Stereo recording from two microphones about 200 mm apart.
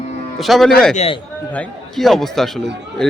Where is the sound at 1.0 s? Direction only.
30° left (ahead or behind).